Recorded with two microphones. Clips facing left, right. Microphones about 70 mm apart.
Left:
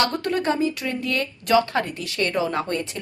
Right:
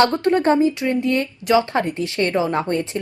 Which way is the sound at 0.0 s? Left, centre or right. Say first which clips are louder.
Right 6 dB; right.